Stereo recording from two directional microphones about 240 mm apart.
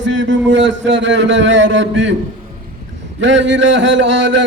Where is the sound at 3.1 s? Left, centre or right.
Right.